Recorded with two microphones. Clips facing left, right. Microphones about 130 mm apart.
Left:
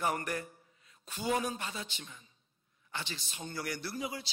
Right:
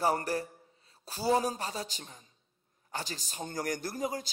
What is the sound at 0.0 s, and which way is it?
A man's voice, 35° right (ahead or behind).